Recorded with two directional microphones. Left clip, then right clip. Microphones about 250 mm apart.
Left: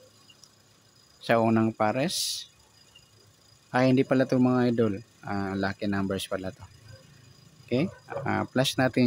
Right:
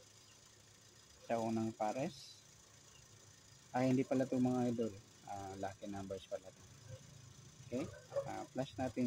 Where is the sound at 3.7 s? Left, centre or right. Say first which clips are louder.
Left 13 dB; left.